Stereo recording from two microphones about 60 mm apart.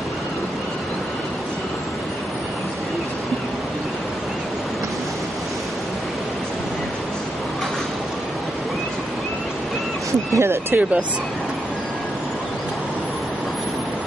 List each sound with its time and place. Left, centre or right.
10.3 s speech: right